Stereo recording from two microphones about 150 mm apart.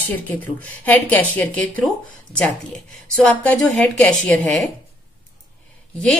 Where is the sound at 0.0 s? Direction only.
10° left (ahead or behind).